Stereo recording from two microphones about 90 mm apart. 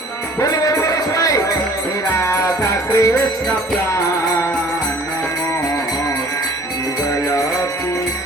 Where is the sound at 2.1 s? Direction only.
35° left (ahead or behind).